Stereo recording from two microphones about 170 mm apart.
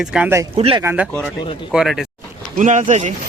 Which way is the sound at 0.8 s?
10° right (ahead or behind).